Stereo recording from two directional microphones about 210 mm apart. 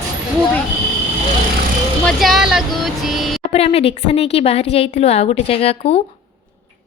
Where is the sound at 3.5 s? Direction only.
30° left (ahead or behind).